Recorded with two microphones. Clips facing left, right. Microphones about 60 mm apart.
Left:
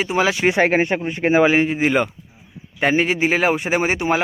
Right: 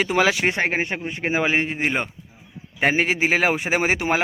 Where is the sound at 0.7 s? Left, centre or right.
Left.